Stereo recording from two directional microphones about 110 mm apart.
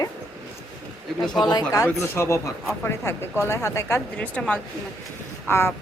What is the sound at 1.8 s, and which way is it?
Speech, 25° left (ahead or behind).